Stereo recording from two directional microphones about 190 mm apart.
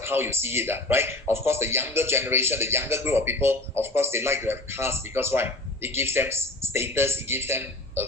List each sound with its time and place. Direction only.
0.0 s speech: 10° right (ahead or behind)